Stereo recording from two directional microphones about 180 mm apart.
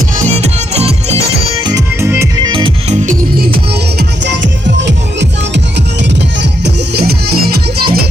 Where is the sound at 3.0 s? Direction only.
50° right (ahead or behind); by 5.6 s 80° right.